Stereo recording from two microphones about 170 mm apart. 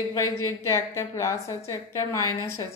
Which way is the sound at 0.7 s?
15° left (ahead or behind).